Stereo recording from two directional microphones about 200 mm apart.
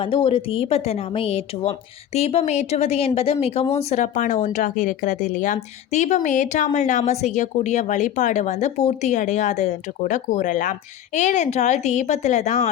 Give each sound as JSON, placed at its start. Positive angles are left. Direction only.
{"t": 0.0, "sound": "a woman's voice", "side_deg": 25}